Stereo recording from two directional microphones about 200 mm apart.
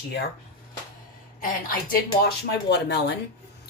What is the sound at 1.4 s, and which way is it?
Speech, 45° left (ahead or behind).